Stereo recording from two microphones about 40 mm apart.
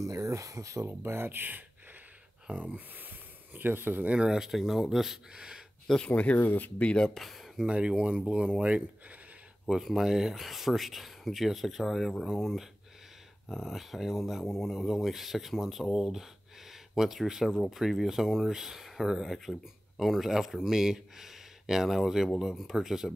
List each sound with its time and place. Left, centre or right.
0.8 s speech: right
2.6 s speech: right
4.2 s speech: centre
4.5 s speech: centre
5.3 s speech: right
6.0 s speech: left
6.4 s speech: left
6.8 s speech: left
7.2 s speech: centre
7.6 s speech: right
9.7 s speech: centre